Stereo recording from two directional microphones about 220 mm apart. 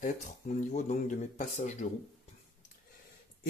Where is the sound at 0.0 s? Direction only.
35° left (ahead or behind).